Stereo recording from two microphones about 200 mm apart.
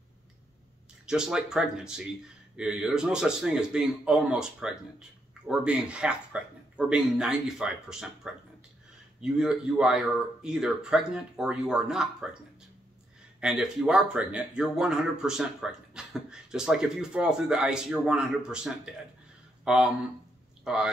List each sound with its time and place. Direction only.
1.0 s speech: 5° right (ahead or behind)
13.4 s speech: 5° right (ahead or behind)